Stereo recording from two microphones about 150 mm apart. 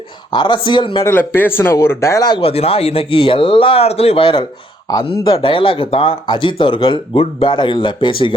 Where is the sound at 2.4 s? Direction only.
40° left (ahead or behind).